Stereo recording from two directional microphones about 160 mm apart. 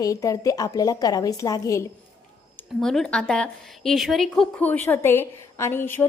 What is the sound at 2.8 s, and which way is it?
A woman's voice, 5° left (ahead or behind).